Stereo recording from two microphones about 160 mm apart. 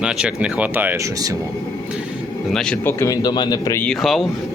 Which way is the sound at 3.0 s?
25° left (ahead or behind).